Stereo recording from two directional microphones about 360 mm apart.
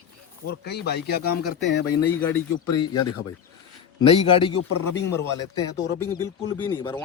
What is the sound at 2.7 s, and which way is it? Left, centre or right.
Speech, centre.